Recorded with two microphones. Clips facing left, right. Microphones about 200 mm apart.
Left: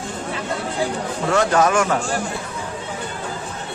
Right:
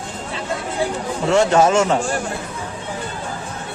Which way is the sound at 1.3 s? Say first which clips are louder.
Right 3 dB; 25° right (ahead or behind).